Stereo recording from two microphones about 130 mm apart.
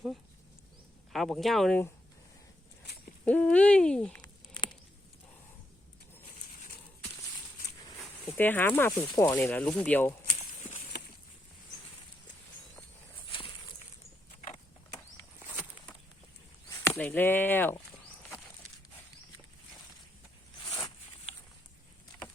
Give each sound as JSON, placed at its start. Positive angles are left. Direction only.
{"t": 1.1, "sound": "speech", "side_deg": 0}
{"t": 3.2, "sound": "hoot", "side_deg": 10}
{"t": 4.2, "sound": "a sound", "side_deg": 35}
{"t": 8.3, "sound": "speech", "side_deg": 15}
{"t": 9.4, "sound": "hoot", "side_deg": 10}
{"t": 15.4, "sound": "a sound", "side_deg": -10}
{"t": 16.6, "sound": "chop", "side_deg": 20}
{"t": 17.0, "sound": "hoot", "side_deg": 15}